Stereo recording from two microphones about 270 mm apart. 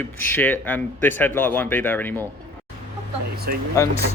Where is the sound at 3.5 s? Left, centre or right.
Right.